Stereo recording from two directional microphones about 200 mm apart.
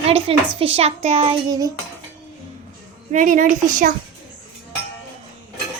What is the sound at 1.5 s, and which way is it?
Cutlery, 15° right (ahead or behind).